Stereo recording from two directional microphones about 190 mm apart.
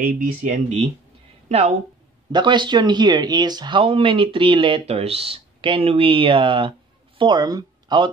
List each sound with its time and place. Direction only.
0.0 s speech: 40° right (ahead or behind)
2.3 s speech: 25° right (ahead or behind)